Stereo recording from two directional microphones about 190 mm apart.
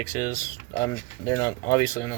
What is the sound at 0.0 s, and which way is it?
Speech, 15° left (ahead or behind).